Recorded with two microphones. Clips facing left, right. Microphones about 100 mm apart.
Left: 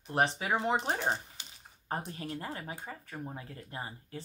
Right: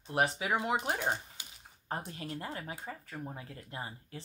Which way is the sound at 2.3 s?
25° left (ahead or behind).